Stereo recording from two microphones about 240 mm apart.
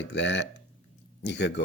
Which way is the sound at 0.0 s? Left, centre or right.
Left.